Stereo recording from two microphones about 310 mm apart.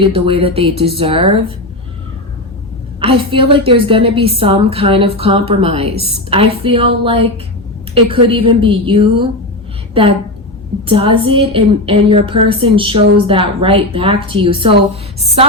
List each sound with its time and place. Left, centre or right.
0.0 s a woman's voice: centre
3.0 s a woman's voice: centre
10.8 s a woman's voice: centre